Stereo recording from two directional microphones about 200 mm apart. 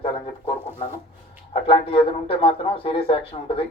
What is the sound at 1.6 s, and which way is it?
Speech, 25° left (ahead or behind).